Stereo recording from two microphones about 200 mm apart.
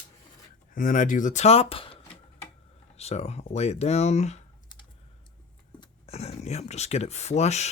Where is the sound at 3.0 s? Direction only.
30° left (ahead or behind).